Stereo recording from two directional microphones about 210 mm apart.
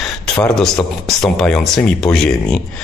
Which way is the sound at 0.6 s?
5° left (ahead or behind).